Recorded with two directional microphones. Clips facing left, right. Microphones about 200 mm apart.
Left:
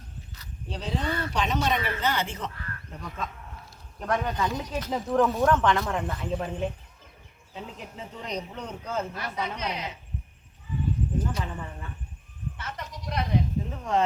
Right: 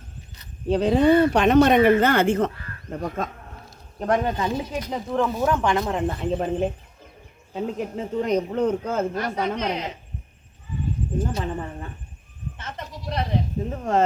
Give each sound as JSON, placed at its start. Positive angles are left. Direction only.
{"t": 0.7, "sound": "speech", "side_deg": -60}
{"t": 4.0, "sound": "speech", "side_deg": -30}
{"t": 4.6, "sound": "speech", "side_deg": -10}
{"t": 4.9, "sound": "speech", "side_deg": 0}
{"t": 7.5, "sound": "speech", "side_deg": -45}
{"t": 11.3, "sound": "speech", "side_deg": -25}
{"t": 12.5, "sound": "goat", "side_deg": -25}
{"t": 13.1, "sound": "bleat", "side_deg": -30}
{"t": 13.7, "sound": "speech", "side_deg": -45}